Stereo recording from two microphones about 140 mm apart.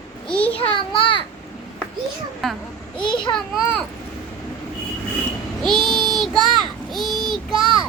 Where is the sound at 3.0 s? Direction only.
35° left (ahead or behind).